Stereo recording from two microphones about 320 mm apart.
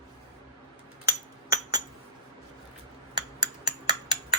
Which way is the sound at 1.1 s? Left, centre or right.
Centre.